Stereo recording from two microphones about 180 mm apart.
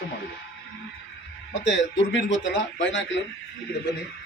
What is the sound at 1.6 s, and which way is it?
Speech, 90° left.